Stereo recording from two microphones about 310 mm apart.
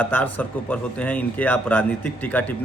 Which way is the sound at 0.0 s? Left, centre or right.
Centre.